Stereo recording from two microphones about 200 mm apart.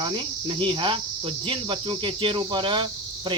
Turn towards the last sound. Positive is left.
turn(degrees=-25)  # may be behind; listen again after turning